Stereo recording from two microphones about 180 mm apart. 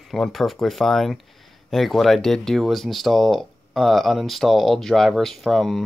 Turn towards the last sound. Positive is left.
turn(degrees=0)  # may be behind; listen again after turning